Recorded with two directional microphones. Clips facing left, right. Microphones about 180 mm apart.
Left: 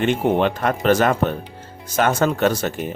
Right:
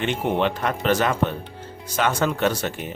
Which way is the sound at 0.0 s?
45° left (ahead or behind).